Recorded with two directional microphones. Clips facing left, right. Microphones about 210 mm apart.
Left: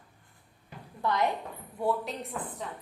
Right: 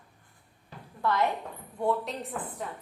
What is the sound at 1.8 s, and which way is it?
Speech, centre (ahead or behind).